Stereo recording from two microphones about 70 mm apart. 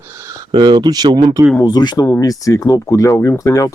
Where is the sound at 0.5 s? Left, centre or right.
Right.